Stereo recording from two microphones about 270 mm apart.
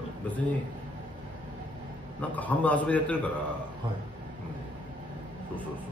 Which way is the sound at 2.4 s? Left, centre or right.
Centre.